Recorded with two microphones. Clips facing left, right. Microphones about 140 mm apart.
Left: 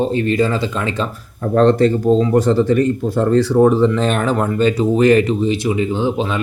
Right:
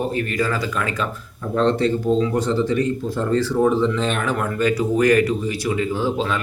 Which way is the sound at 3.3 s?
65° left (ahead or behind).